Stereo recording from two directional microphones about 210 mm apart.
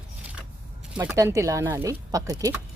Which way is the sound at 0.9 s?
10° right (ahead or behind).